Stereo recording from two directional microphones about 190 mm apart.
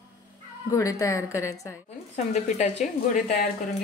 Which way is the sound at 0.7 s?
15° left (ahead or behind).